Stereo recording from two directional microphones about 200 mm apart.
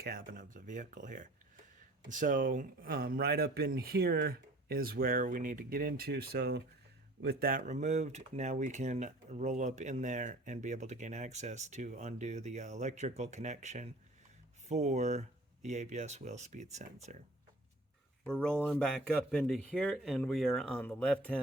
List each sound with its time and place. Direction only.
0.0 s speech: 45° right (ahead or behind)
18.2 s speech: 5° left (ahead or behind)